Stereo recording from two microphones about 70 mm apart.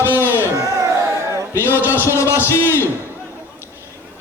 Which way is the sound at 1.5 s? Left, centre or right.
Left.